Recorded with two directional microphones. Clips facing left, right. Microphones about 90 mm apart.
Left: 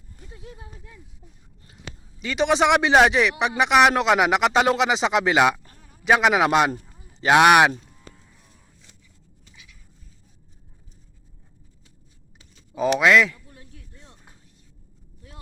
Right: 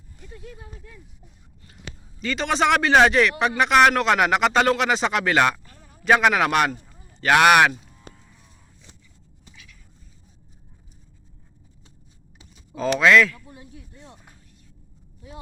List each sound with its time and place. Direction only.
0.3 s speech: 20° left (ahead or behind)
2.2 s a man's voice: 15° left (ahead or behind)
5.8 s a man's voice: 5° left (ahead or behind)
12.9 s a man's voice: 10° left (ahead or behind)
13.5 s a sound: 10° right (ahead or behind)
15.3 s a sound: 5° right (ahead or behind)